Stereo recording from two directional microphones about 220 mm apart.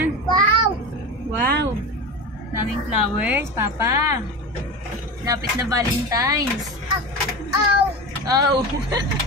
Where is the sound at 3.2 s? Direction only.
10° right (ahead or behind).